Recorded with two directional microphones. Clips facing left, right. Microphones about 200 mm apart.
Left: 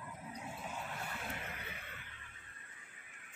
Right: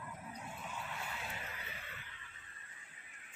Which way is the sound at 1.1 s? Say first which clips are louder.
Left 2 dB; 55° left (ahead or behind).